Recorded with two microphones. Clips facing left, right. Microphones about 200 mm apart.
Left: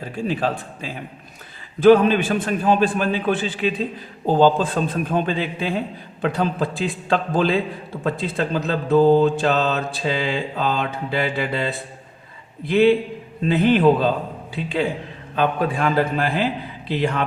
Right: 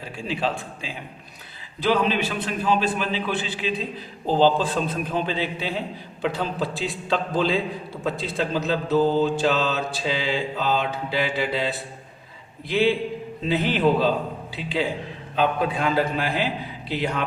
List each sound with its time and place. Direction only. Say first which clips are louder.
0.2 s a man's voice: left 4 dB; 45° left (ahead or behind)
8.0 s mantra: left 3 dB; 55° left (ahead or behind)
14.5 s a man's voice: left 4 dB; 50° left (ahead or behind)
17.0 s mantra: left 4 dB; 55° left (ahead or behind)